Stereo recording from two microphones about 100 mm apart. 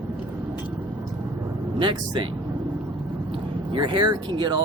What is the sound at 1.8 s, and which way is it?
Speech, 50° right (ahead or behind).